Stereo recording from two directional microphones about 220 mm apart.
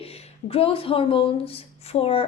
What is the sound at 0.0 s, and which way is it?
Speech, 25° left (ahead or behind).